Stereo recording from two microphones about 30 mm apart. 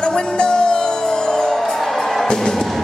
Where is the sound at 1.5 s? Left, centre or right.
Centre.